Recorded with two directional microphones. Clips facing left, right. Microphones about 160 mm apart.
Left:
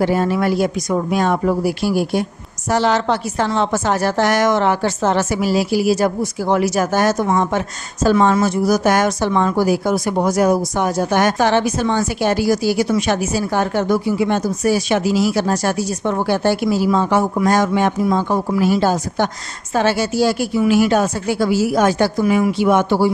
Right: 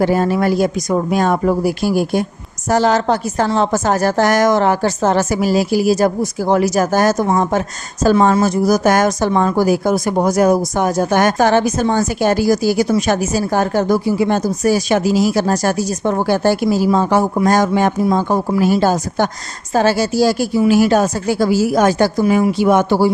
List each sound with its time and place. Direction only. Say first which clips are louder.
0.0 s a woman's voice: right 2 dB; 40° right (ahead or behind)